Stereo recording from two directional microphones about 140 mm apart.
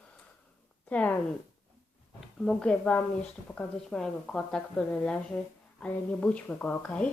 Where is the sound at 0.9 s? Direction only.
10° left (ahead or behind).